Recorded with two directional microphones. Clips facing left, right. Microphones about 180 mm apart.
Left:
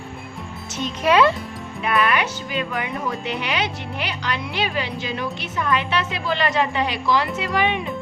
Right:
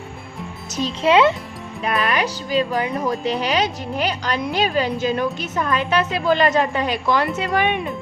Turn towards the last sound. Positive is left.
turn(degrees=-55)  # may be behind; listen again after turning